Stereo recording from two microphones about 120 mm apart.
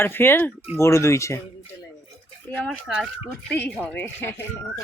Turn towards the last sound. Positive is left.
turn(degrees=15)  # may be behind; listen again after turning